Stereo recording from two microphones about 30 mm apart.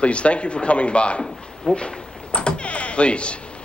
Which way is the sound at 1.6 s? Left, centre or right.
Left.